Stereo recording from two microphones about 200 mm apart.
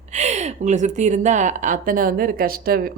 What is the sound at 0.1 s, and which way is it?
Speech, 35° right (ahead or behind).